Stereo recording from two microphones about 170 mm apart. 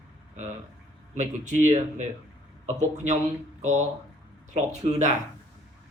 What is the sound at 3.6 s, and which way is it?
Speech, 45° right (ahead or behind).